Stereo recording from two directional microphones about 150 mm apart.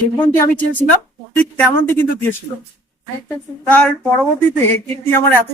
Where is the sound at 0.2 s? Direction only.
15° left (ahead or behind).